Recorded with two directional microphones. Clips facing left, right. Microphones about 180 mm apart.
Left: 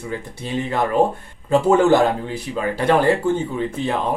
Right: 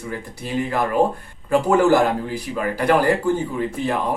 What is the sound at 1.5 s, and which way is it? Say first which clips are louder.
Speech: left 1 dB; 25° left (ahead or behind).